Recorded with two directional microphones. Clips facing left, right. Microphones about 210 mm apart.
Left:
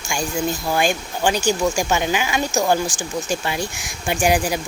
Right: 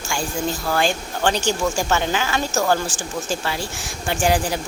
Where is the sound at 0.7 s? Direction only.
15° left (ahead or behind).